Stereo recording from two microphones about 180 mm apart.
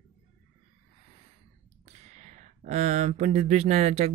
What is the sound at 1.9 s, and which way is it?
Speech, 40° right (ahead or behind).